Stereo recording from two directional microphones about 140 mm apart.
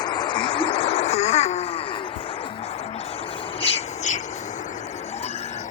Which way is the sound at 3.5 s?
45° left (ahead or behind).